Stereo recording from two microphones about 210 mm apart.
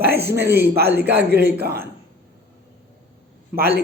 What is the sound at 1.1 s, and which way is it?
Speech, 50° right (ahead or behind).